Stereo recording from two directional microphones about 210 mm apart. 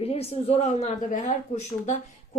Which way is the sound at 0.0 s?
30° left (ahead or behind).